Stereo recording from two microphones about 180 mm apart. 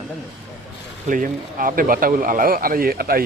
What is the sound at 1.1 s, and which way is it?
Speech, 50° right (ahead or behind).